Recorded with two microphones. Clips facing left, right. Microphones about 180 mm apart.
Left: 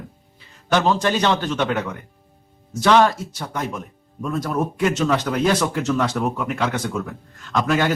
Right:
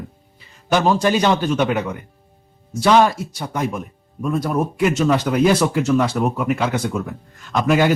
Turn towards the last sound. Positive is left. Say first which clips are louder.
# right 3 dB
turn(degrees=-10)  # may be behind; listen again after turning